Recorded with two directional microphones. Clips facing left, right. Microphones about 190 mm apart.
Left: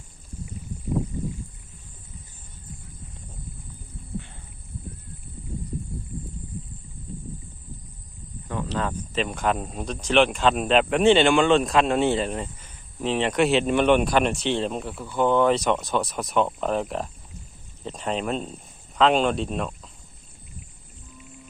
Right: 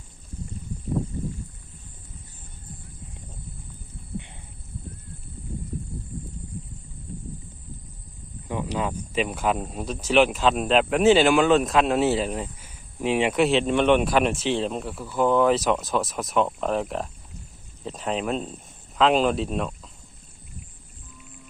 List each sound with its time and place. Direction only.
8.4 s speech: 15° right (ahead or behind)